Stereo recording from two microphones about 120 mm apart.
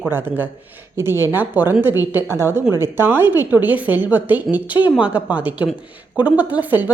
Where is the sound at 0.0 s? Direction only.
15° right (ahead or behind).